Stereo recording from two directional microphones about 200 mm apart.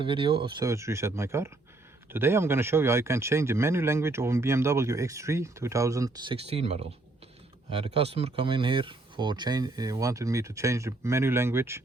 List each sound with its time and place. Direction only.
0.0 s speech: 25° right (ahead or behind)
6.3 s speech: 30° right (ahead or behind); by 11.8 s 10° right (ahead or behind)